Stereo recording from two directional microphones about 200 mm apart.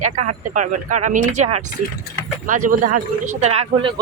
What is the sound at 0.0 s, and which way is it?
Speech, 35° right (ahead or behind).